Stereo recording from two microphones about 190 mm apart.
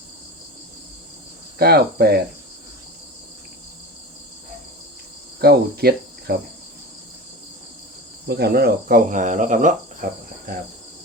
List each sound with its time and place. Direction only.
1.5 s cricket: 55° right (ahead or behind)
5.4 s cricket: 55° right (ahead or behind)
8.3 s cricket: 55° right (ahead or behind)